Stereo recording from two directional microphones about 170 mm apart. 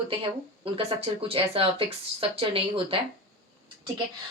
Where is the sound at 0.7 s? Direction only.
35° right (ahead or behind).